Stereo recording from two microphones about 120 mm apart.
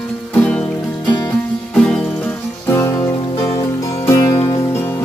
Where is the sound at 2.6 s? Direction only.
20° left (ahead or behind).